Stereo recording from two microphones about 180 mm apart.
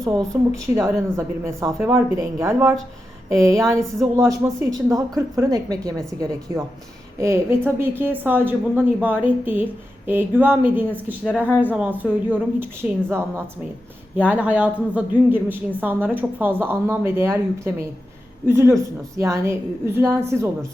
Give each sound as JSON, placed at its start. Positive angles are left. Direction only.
{"t": 0.3, "sound": "a woman's voice", "side_deg": -5}